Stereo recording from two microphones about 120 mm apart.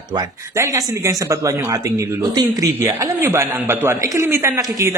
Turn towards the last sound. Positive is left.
turn(degrees=-25)  # may be behind; listen again after turning